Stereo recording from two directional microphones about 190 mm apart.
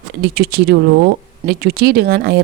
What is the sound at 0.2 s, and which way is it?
Speech, 55° right (ahead or behind).